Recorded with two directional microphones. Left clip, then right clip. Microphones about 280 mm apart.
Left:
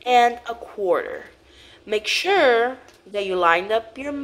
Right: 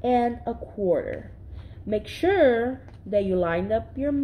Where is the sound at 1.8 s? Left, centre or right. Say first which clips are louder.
Left 3 dB; centre.